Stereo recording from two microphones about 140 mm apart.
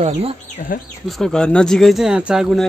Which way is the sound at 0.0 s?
45° right (ahead or behind).